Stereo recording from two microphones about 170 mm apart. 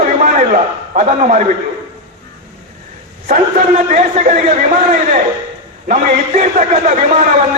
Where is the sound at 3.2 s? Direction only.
50° right (ahead or behind).